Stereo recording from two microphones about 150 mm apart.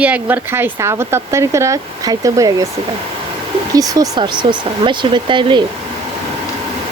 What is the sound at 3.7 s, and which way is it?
Speech, 25° right (ahead or behind).